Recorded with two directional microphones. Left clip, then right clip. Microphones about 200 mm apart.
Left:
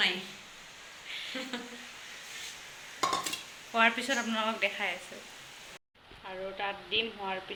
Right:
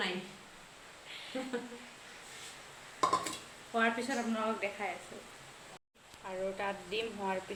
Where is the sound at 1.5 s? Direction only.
40° right (ahead or behind).